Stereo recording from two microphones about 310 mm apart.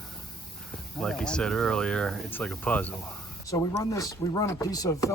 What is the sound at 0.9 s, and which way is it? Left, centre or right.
Speech, centre.